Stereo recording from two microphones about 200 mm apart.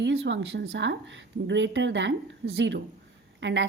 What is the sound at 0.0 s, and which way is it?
A woman's voice, 60° right (ahead or behind).